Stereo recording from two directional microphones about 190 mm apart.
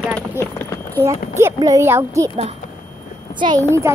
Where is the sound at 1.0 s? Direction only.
15° right (ahead or behind).